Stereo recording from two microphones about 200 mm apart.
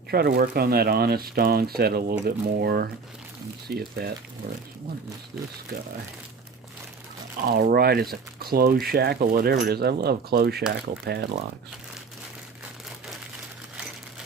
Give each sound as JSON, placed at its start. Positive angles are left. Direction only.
{"t": 0.1, "sound": "speech", "side_deg": -50}
{"t": 7.4, "sound": "speech", "side_deg": -50}